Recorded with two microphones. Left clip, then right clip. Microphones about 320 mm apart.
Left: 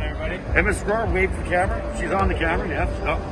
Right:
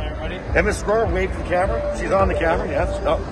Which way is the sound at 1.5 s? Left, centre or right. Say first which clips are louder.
Right 6 dB; centre.